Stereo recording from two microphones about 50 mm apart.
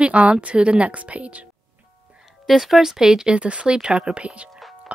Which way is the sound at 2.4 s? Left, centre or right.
Centre.